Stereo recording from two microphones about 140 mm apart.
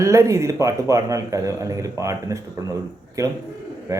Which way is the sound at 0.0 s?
20° right (ahead or behind).